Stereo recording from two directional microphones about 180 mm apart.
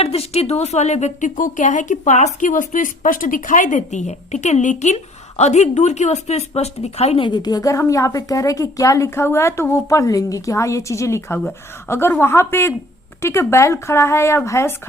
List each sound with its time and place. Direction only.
0.0 s speech: 35° left (ahead or behind); by 14.8 s 15° left (ahead or behind)